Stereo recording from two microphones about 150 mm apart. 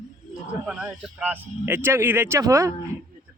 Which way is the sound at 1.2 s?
10° right (ahead or behind).